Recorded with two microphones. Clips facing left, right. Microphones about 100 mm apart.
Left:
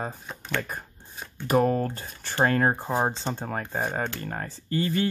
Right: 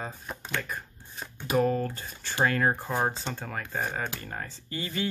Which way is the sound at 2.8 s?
20° left (ahead or behind).